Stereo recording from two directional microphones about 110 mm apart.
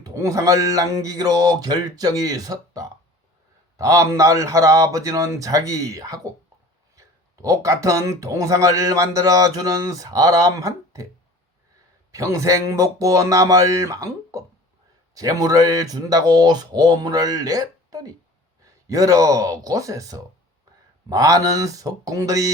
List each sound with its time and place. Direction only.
0.0 s speech: 30° right (ahead or behind)
7.4 s speech: 30° right (ahead or behind)
12.1 s speech: 30° right (ahead or behind)